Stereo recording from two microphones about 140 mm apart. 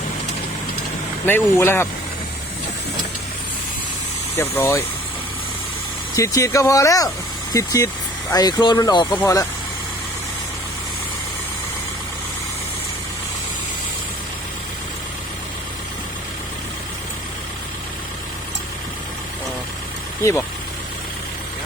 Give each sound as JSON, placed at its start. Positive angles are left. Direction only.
{"t": 1.2, "sound": "speech", "side_deg": 15}
{"t": 4.4, "sound": "speech", "side_deg": 20}
{"t": 6.1, "sound": "speech", "side_deg": 20}